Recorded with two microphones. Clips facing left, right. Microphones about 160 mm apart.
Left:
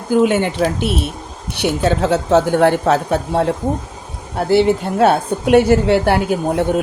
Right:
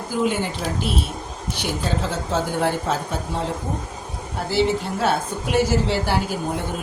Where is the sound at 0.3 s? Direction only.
70° left (ahead or behind).